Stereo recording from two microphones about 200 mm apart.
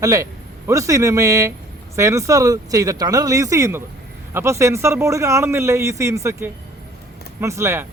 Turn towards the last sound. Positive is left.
turn(degrees=-15)  # may be behind; listen again after turning